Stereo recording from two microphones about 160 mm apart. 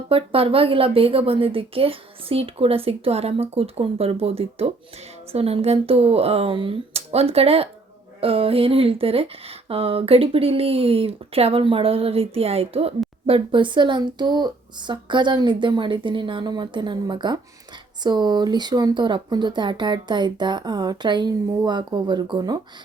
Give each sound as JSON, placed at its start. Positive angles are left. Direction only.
{"t": 0.1, "sound": "speech", "side_deg": -35}